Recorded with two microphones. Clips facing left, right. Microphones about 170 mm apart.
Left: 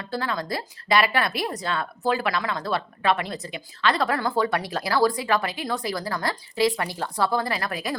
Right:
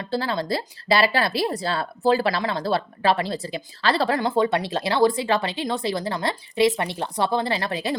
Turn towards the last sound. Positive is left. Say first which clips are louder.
# right 3 dB
turn(degrees=-30)  # may be behind; listen again after turning